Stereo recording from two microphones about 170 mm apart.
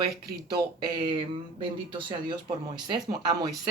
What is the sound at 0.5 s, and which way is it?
Speech, 25° right (ahead or behind).